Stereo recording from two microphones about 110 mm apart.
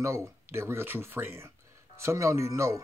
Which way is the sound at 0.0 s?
25° right (ahead or behind).